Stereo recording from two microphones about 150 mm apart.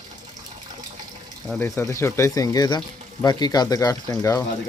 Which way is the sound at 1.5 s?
20° left (ahead or behind).